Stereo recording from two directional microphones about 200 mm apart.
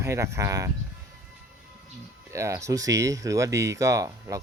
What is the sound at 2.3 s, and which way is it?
Speech, 15° right (ahead or behind).